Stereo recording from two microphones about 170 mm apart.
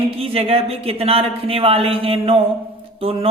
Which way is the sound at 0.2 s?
35° right (ahead or behind).